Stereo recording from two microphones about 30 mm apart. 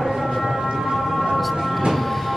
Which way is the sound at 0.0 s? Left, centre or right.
Centre.